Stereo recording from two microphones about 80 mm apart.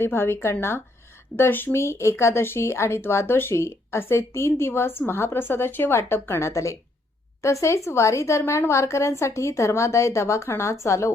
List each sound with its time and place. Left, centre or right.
0.0 s speech: left